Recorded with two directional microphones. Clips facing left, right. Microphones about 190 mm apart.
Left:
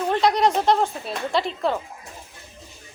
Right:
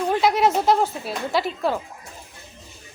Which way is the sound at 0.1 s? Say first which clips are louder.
Even; 5° right (ahead or behind).